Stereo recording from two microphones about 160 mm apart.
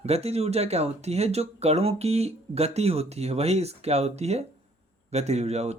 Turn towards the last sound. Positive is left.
turn(degrees=-40)  # may be behind; listen again after turning